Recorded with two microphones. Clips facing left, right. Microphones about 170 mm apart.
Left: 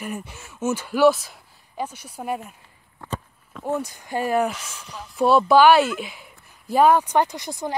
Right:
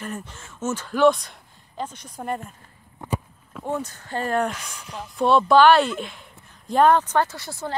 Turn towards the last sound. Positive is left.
turn(degrees=15)  # may be behind; listen again after turning